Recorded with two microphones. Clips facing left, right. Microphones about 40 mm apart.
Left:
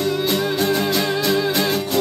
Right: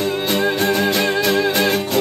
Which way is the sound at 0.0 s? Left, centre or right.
Right.